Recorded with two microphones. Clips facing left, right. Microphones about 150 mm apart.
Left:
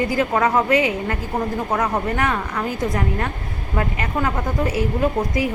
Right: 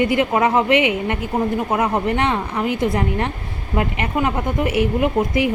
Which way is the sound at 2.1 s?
25° right (ahead or behind).